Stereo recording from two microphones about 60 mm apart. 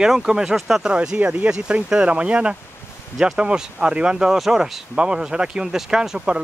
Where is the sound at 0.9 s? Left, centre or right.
Centre.